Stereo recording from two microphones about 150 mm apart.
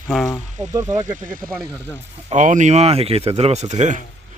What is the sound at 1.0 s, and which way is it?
Speech, 60° right (ahead or behind).